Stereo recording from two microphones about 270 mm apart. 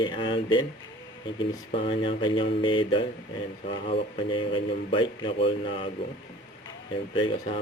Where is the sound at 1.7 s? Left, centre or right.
Centre.